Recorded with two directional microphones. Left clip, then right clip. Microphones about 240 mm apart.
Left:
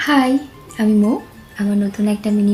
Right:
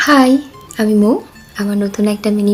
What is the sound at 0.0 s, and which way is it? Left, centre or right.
Speech, right.